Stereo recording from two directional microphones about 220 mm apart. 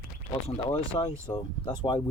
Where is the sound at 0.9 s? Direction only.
25° left (ahead or behind).